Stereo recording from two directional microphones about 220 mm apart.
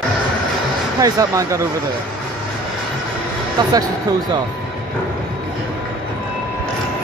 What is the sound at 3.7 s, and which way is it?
Speech, 15° right (ahead or behind).